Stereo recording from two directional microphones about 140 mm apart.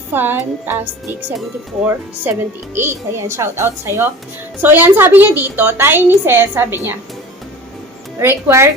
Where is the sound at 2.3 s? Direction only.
15° right (ahead or behind).